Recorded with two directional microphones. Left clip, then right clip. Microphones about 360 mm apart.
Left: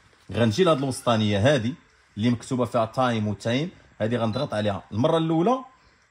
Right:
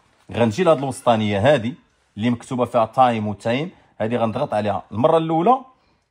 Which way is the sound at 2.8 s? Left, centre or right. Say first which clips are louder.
Right 8 dB; right.